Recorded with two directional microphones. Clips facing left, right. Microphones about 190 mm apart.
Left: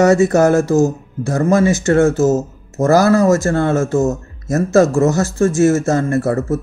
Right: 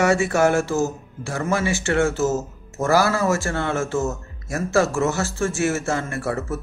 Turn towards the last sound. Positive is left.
turn(degrees=40)  # may be behind; listen again after turning